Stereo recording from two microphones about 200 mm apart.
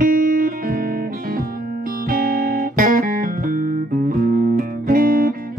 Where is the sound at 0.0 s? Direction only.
45° right (ahead or behind).